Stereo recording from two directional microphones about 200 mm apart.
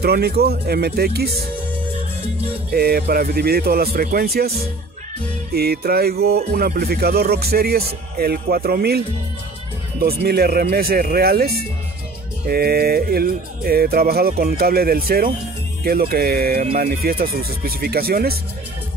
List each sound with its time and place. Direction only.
0.0 s speech: 50° right (ahead or behind)
2.7 s speech: 50° right (ahead or behind)
5.5 s speech: 50° right (ahead or behind)